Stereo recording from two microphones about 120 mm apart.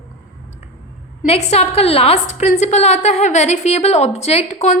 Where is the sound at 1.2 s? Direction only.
60° left (ahead or behind).